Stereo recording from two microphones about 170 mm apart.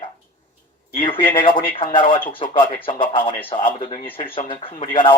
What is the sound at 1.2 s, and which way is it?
Speech, 30° left (ahead or behind).